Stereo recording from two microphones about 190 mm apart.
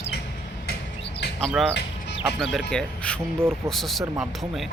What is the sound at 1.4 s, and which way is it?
Speech, 5° left (ahead or behind).